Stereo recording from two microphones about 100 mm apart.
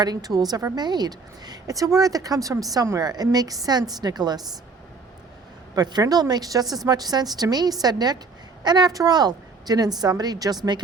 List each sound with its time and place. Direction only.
0.0 s a woman's voice: 40° right (ahead or behind)
5.7 s a woman's voice: 40° right (ahead or behind)